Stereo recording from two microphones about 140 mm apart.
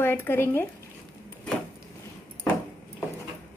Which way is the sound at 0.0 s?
15° left (ahead or behind).